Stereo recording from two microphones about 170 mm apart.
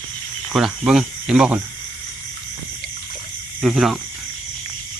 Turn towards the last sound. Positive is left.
turn(degrees=0)  # may be behind; listen again after turning